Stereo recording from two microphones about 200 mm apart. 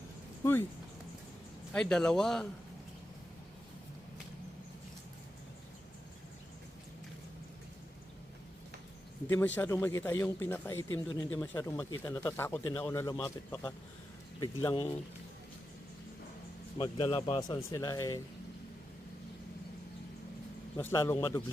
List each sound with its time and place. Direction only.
1.7 s a man's voice: 5° left (ahead or behind)
9.6 s speech: 15° left (ahead or behind)
16.7 s speech: 25° left (ahead or behind)
20.7 s speech: 15° left (ahead or behind)